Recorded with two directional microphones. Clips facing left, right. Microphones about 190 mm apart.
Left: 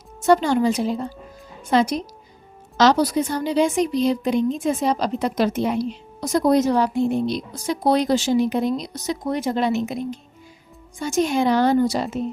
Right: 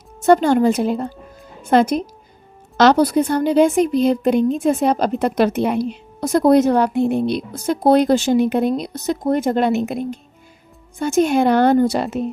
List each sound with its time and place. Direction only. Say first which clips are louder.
0.3 s a woman's voice: right 4 dB; 50° right (ahead or behind)